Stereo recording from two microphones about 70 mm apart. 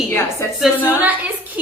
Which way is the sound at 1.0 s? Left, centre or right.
Right.